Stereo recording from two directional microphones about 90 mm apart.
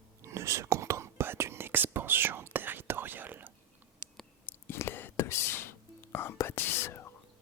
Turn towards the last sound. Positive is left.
turn(degrees=25)  # may be behind; listen again after turning